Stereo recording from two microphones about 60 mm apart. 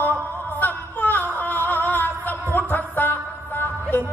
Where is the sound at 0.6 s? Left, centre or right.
Left.